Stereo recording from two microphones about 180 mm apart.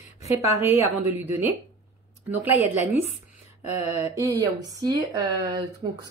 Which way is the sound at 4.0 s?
20° right (ahead or behind).